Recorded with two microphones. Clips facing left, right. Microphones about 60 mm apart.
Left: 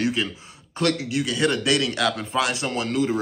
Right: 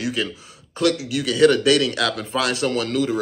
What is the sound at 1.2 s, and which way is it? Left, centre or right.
A man's voice, left.